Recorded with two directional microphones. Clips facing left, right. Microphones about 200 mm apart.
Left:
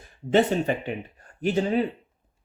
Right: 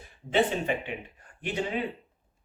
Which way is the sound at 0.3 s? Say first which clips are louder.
Left 5 dB; 40° left (ahead or behind).